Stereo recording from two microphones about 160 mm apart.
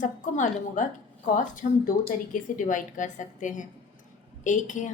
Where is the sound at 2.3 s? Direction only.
55° left (ahead or behind).